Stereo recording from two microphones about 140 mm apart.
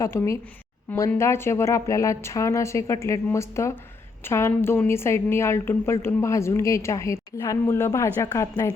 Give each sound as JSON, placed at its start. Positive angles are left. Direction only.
{"t": 0.0, "sound": "a woman's voice", "side_deg": 20}